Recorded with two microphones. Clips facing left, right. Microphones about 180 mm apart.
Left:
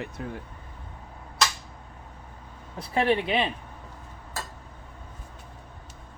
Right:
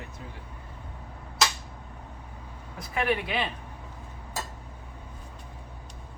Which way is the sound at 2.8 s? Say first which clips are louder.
Left 4 dB; 30° left (ahead or behind).